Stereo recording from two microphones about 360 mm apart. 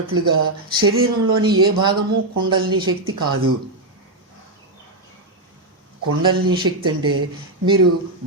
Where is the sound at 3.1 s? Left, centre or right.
Right.